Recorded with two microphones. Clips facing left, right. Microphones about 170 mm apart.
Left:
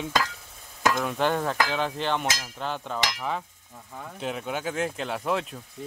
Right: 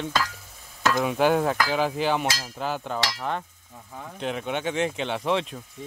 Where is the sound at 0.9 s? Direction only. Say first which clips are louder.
Right 4 dB; 5° right (ahead or behind).